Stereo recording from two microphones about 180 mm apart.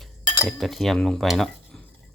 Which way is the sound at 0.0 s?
Centre (ahead or behind).